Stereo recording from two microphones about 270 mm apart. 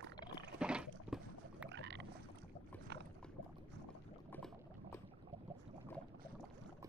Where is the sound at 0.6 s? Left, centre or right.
Centre.